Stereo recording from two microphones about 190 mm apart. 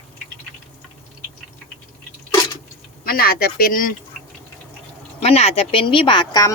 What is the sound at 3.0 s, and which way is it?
Speech, 50° left (ahead or behind).